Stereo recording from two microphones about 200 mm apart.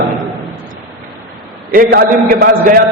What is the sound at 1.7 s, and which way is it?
A man's voice, 45° right (ahead or behind).